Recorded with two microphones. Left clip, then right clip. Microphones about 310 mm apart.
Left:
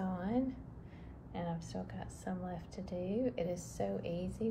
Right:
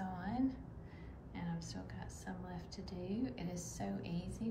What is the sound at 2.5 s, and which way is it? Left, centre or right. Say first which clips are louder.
A woman's voice: left 6 dB; centre.